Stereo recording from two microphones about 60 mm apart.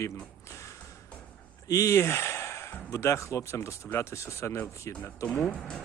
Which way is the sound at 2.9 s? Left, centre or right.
Left.